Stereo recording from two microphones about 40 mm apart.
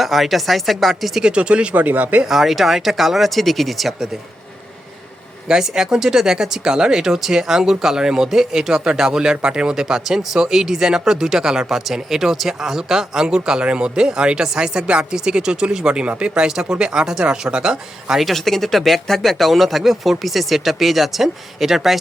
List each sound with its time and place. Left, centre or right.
0.0 s speech: centre
1.2 s speech: right
1.7 s speech: right
2.2 s speech: centre
5.5 s speech: centre
16.5 s speech: centre
18.2 s speech: centre